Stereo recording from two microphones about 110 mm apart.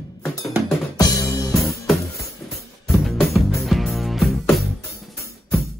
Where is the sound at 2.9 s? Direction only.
Centre (ahead or behind).